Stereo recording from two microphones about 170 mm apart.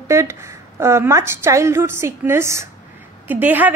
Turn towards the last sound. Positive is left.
turn(degrees=-10)  # may be behind; listen again after turning